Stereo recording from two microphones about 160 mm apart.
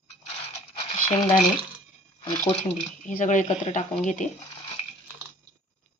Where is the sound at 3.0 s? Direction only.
50° left (ahead or behind).